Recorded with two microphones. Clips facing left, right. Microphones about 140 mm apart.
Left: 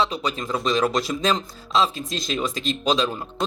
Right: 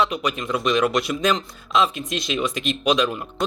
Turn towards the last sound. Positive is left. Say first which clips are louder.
# right 2 dB
turn(degrees=30)  # may be behind; listen again after turning